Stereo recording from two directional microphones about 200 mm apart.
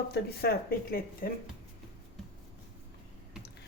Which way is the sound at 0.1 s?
50° left (ahead or behind).